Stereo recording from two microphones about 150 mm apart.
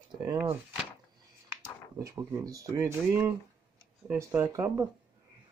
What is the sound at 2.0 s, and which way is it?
Speech, 20° right (ahead or behind).